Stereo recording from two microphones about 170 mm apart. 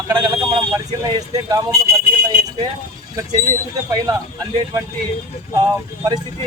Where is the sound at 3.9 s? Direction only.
20° right (ahead or behind).